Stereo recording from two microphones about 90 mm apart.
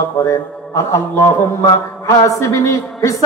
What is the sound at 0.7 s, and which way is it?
A man's voice, 30° left (ahead or behind).